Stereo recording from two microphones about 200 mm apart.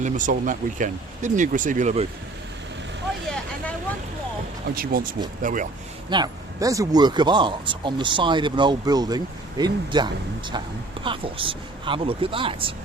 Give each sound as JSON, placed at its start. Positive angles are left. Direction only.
{"t": 0.0, "sound": "speech", "side_deg": -40}
{"t": 4.7, "sound": "speech", "side_deg": -45}
{"t": 6.1, "sound": "speech", "side_deg": -20}